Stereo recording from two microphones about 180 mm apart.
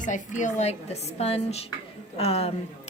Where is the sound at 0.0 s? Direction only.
45° left (ahead or behind).